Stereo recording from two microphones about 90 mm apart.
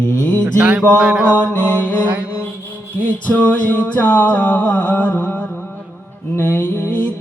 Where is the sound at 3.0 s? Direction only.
20° left (ahead or behind).